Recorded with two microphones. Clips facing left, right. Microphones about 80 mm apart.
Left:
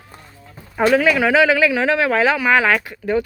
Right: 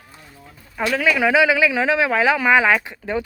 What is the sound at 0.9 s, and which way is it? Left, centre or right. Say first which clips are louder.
Speech: left 2 dB; centre.